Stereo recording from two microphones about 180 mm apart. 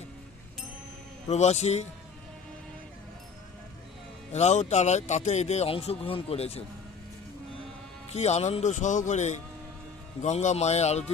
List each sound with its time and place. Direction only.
1.3 s speech: 40° left (ahead or behind)
4.3 s speech: 40° left (ahead or behind)
8.1 s speech: 35° left (ahead or behind)